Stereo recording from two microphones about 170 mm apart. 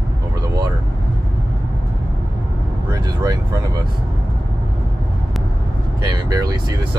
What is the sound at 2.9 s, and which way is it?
Speech, 20° right (ahead or behind).